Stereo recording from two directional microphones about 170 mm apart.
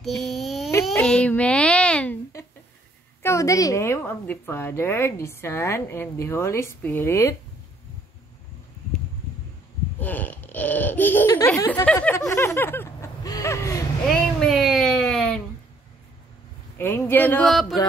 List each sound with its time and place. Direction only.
0.0 s babbling: centre (ahead or behind)
0.9 s a sound: 5° left (ahead or behind)
3.2 s a woman's voice: 15° left (ahead or behind)
9.9 s a woman's voice: 10° left (ahead or behind)
14.4 s baby cry: centre (ahead or behind)
16.7 s a woman's voice: 15° left (ahead or behind)
17.5 s a sound: centre (ahead or behind)